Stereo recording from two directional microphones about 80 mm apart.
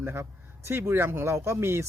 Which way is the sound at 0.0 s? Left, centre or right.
Right.